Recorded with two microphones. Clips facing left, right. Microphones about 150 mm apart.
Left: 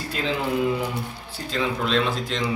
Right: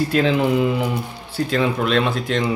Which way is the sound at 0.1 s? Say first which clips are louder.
Right 4 dB; 65° right (ahead or behind).